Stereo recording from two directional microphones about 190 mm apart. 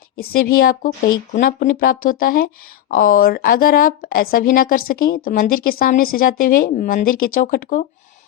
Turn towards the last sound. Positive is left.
turn(degrees=45)  # may be behind; listen again after turning